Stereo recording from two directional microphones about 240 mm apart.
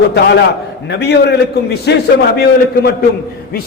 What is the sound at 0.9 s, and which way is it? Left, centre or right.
A man's voice, left.